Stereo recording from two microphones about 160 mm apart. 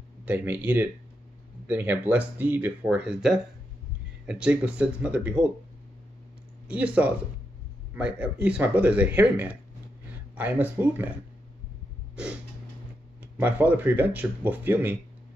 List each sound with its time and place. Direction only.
0.2 s speech: 10° right (ahead or behind)
6.7 s speech: 10° right (ahead or behind)
13.2 s speech: 10° right (ahead or behind)